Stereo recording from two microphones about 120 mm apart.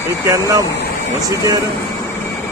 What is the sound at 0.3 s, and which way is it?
Speech, 25° right (ahead or behind).